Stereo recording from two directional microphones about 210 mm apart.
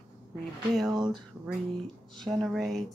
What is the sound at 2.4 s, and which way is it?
Speech, centre (ahead or behind).